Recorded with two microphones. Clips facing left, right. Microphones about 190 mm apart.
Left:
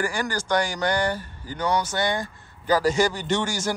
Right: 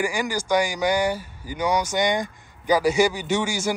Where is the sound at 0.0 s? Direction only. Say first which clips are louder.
Right 2 dB; 10° right (ahead or behind).